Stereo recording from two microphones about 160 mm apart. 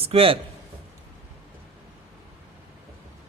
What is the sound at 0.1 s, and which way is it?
Speech, 35° right (ahead or behind).